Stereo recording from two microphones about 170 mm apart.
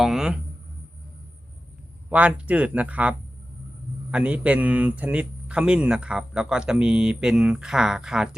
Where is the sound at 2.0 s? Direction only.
10° right (ahead or behind).